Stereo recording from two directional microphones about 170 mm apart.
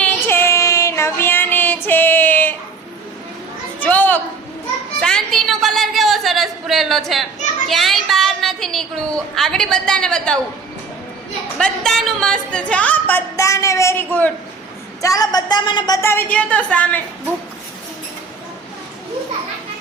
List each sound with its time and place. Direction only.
0.0 s child singing: 10° left (ahead or behind)
3.8 s a sound: 10° left (ahead or behind)
7.7 s a woman's voice: centre (ahead or behind)
11.5 s speech: 5° left (ahead or behind)
15.0 s a woman's voice: 20° left (ahead or behind)